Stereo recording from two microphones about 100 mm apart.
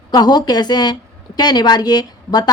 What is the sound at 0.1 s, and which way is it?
A woman's voice, 45° left (ahead or behind).